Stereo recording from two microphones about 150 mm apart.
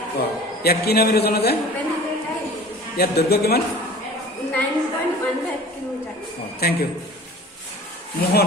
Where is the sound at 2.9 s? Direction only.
90° left.